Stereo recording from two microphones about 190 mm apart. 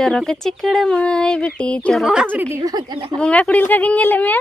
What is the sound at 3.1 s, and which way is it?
Speech, 5° left (ahead or behind).